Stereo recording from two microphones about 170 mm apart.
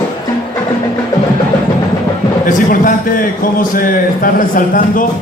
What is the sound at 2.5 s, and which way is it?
A man's voice, 55° left (ahead or behind).